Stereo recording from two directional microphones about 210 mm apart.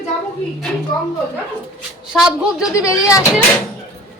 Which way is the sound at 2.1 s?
Centre (ahead or behind).